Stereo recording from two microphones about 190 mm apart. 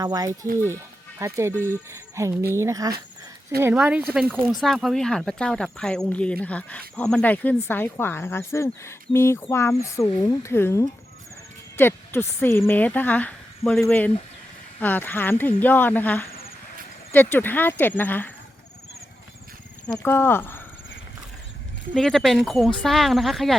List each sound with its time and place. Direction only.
0.0 s speech: 20° right (ahead or behind)
0.3 s speech: 45° right (ahead or behind)
1.2 s speech: 15° right (ahead or behind); by 18.3 s 10° left (ahead or behind)
20.0 s speech: 10° left (ahead or behind)
21.9 s speech: 5° left (ahead or behind)